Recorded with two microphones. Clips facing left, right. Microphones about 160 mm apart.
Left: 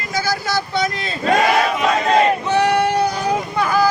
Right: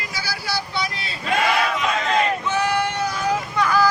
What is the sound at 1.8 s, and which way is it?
Hubbub, 35° left (ahead or behind).